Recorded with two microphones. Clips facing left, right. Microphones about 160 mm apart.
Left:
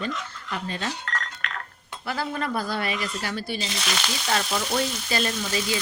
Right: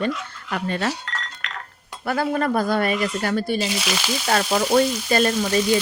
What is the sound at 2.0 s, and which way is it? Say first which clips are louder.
Frying: right 7 dB; 50° right (ahead or behind).